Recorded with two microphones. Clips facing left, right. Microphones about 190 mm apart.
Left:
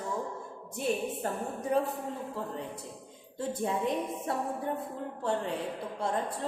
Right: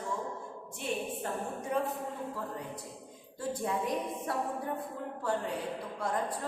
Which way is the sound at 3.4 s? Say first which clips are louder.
Left 2 dB; 25° left (ahead or behind).